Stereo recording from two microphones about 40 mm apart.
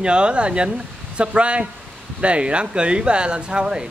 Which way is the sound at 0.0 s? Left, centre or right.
Right.